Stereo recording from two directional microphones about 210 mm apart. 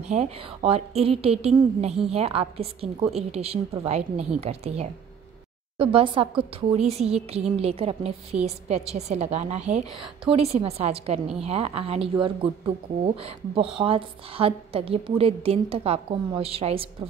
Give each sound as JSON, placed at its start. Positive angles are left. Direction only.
{"t": 0.0, "sound": "a woman's voice", "side_deg": -30}